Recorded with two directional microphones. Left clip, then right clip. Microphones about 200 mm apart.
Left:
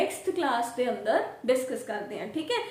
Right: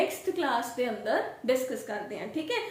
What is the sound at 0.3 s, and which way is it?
A woman's voice, 10° left (ahead or behind).